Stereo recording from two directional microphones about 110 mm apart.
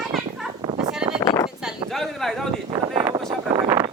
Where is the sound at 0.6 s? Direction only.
30° right (ahead or behind).